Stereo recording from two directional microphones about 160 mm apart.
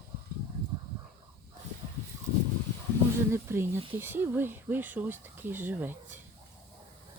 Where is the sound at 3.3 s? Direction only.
15° right (ahead or behind).